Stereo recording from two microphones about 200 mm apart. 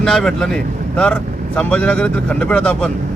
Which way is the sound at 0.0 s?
Centre (ahead or behind).